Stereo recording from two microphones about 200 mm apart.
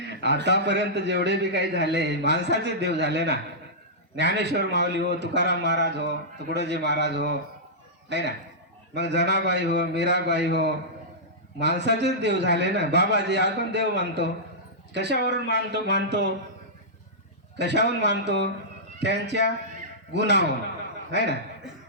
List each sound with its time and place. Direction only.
0.2 s a man's voice: 60° right (ahead or behind)
17.6 s a man's voice: 60° right (ahead or behind)